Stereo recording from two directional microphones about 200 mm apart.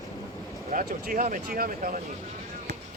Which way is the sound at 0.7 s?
45° right (ahead or behind).